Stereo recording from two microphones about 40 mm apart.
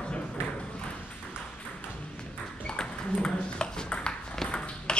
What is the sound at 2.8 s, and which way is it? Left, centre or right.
Ping, centre.